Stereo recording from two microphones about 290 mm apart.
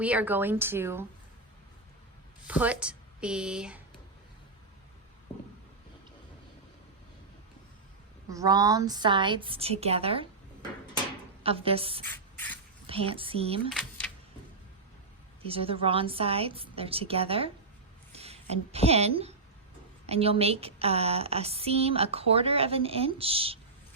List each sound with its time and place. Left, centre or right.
0.0 s a woman's voice: centre
2.5 s a woman's voice: centre
8.3 s a woman's voice: centre
11.4 s speech: centre
13.7 s speech: centre
15.4 s a woman's voice: centre